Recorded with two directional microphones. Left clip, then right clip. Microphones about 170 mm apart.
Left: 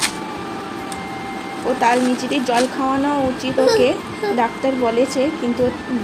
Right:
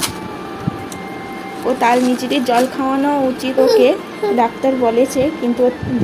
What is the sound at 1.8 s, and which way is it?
Speech, 25° right (ahead or behind).